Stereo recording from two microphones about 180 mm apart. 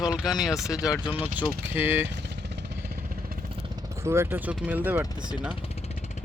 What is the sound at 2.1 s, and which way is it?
Vehicle, 70° right (ahead or behind).